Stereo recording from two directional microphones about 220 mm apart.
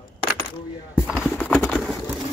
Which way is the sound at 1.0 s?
Centre (ahead or behind).